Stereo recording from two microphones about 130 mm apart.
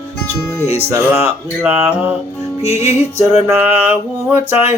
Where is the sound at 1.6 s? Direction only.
15° right (ahead or behind).